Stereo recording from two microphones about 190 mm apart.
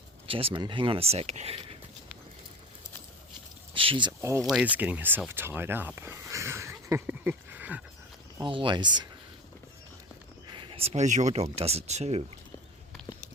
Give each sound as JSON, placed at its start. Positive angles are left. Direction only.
{"t": 0.3, "sound": "speech", "side_deg": -30}
{"t": 3.8, "sound": "a sound", "side_deg": -25}
{"t": 4.2, "sound": "speech", "side_deg": -15}
{"t": 4.4, "sound": "speech", "side_deg": -5}
{"t": 8.4, "sound": "speech", "side_deg": -25}
{"t": 10.5, "sound": "speech", "side_deg": -25}